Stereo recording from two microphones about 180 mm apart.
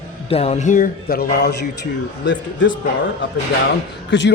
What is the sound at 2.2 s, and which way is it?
Speech, 85° left.